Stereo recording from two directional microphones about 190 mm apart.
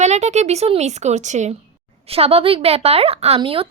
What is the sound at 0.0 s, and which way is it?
A woman's voice, 35° right (ahead or behind).